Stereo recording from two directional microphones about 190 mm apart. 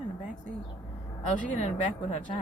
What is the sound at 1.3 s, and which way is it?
Speech, 40° left (ahead or behind).